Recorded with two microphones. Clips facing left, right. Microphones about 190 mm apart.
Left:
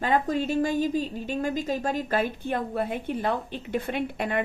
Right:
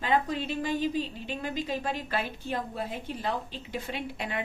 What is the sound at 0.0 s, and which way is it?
A woman's voice, 45° left (ahead or behind).